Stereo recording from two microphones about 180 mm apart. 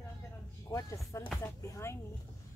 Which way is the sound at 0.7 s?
15° left (ahead or behind).